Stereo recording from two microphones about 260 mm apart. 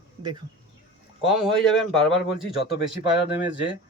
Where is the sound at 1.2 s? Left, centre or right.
Centre.